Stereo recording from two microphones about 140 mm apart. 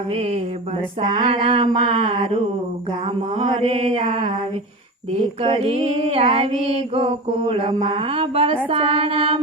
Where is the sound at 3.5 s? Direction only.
45° right (ahead or behind).